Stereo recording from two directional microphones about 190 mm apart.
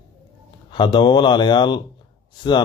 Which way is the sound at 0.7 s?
25° left (ahead or behind).